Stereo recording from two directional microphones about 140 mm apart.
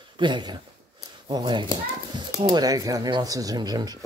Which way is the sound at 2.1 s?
30° right (ahead or behind).